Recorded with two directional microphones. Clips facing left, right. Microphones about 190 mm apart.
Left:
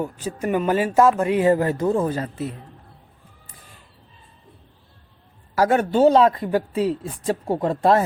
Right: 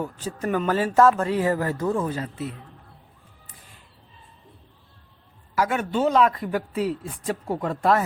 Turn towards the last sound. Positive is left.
turn(degrees=30)  # may be behind; listen again after turning